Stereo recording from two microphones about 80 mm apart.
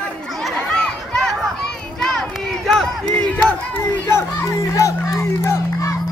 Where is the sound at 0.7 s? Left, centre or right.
Centre.